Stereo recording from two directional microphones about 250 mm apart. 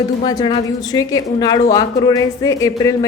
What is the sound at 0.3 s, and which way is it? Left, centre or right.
Speech, centre.